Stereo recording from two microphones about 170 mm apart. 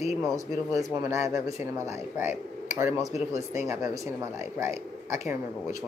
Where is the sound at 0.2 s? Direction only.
20° right (ahead or behind).